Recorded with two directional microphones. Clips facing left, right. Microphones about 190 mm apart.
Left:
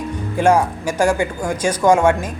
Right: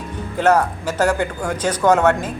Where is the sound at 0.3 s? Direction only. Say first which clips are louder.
Left 1 dB; 10° left (ahead or behind).